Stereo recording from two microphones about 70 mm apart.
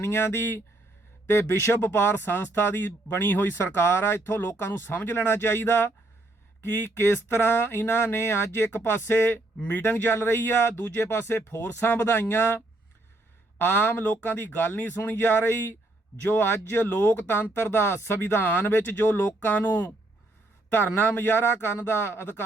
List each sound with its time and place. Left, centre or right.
0.0 s speech: left